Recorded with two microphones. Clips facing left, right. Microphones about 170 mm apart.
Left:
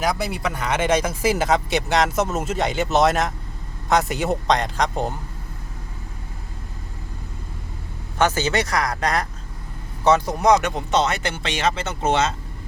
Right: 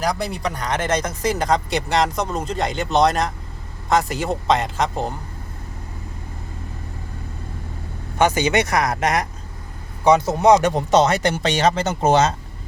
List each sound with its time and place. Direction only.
0.0 s speech: centre (ahead or behind)
8.2 s speech: 15° right (ahead or behind)
10.2 s speech: 25° right (ahead or behind)